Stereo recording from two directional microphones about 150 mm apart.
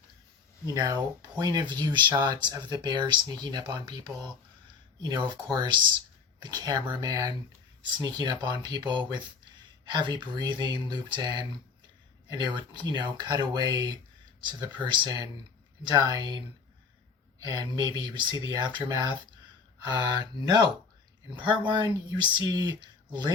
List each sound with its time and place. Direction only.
0.7 s speech: 25° right (ahead or behind)
17.4 s speech: 25° right (ahead or behind)
21.7 s speech: 30° right (ahead or behind)